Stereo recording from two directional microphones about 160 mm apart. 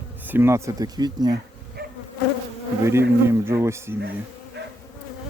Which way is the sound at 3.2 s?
15° right (ahead or behind).